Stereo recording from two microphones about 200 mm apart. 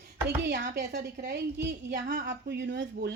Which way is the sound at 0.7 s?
55° right (ahead or behind).